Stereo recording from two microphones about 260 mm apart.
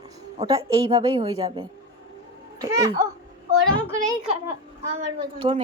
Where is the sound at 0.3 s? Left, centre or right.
Right.